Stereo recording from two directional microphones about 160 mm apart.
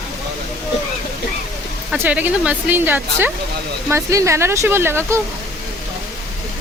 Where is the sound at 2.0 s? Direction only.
10° right (ahead or behind).